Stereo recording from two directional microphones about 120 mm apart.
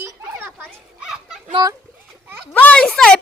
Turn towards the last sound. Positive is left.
turn(degrees=5)  # may be behind; listen again after turning